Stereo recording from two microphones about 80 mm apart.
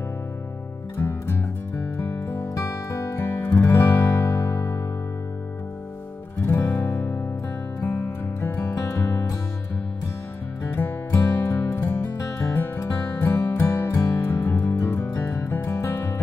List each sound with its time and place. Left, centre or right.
0.9 s music: left
6.4 s music: left
11.1 s music: left